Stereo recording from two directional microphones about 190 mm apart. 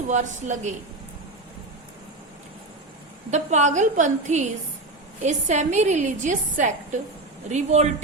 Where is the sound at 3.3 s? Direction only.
40° right (ahead or behind).